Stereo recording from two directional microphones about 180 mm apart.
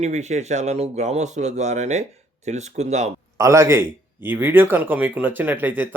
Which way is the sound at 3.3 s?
15° right (ahead or behind).